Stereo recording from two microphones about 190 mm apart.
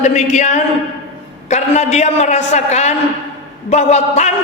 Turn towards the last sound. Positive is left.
turn(degrees=35)  # may be behind; listen again after turning